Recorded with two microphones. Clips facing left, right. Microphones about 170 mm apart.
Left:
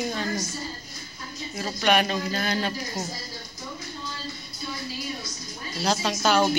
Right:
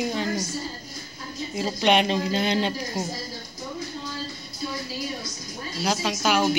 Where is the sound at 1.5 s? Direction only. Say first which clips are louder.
Right 2 dB; 20° right (ahead or behind).